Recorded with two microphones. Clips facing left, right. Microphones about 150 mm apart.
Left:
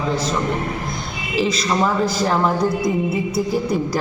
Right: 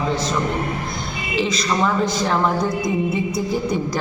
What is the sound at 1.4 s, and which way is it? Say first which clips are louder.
A woman's voice: left 1 dB; 5° left (ahead or behind).